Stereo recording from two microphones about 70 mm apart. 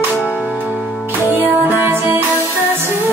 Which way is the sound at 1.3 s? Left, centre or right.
Right.